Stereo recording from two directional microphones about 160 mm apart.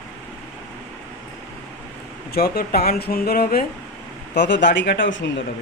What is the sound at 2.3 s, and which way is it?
Speech, 75° left (ahead or behind).